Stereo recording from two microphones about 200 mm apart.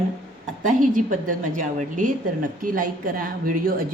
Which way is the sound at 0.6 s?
40° right (ahead or behind).